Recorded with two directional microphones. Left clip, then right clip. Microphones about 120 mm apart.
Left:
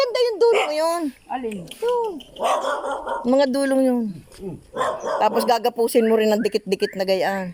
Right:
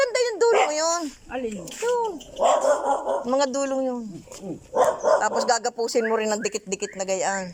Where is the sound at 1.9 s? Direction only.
25° left (ahead or behind).